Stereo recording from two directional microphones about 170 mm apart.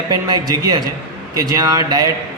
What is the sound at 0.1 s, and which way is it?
A man's voice, 20° right (ahead or behind).